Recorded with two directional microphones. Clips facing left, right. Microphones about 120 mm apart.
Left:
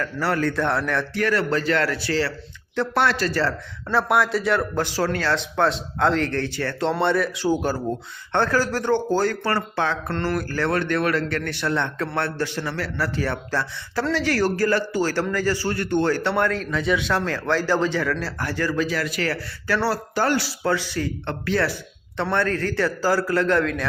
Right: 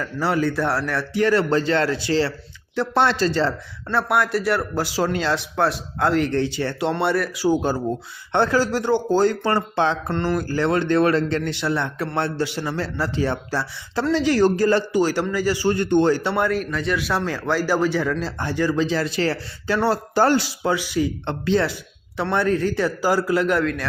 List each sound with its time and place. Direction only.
0.0 s a man's voice: 15° right (ahead or behind)
1.1 s speech: 25° right (ahead or behind)
3.8 s a man's voice: centre (ahead or behind); by 6.9 s 15° right (ahead or behind)
7.0 s speech: 5° right (ahead or behind)
7.5 s a man's voice: 20° right (ahead or behind)
20.1 s speech: 35° right (ahead or behind)
20.4 s a man's voice: 15° right (ahead or behind)